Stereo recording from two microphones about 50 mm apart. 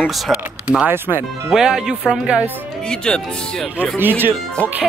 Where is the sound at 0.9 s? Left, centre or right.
Right.